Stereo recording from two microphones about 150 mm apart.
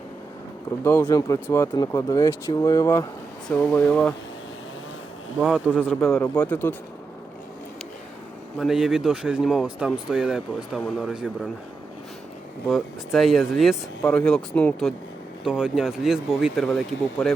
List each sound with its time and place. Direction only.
0.9 s speech: 15° left (ahead or behind)
3.5 s speech: 10° left (ahead or behind)
5.4 s speech: centre (ahead or behind)
8.5 s speech: centre (ahead or behind)
12.6 s speech: centre (ahead or behind)